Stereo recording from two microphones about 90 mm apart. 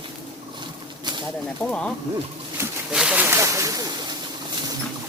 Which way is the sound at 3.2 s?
25° right (ahead or behind).